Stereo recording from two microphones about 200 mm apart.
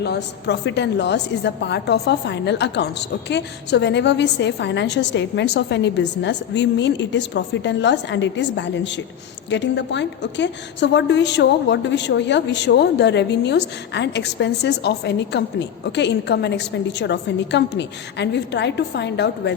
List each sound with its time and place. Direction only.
0.0 s a woman's voice: 55° left (ahead or behind)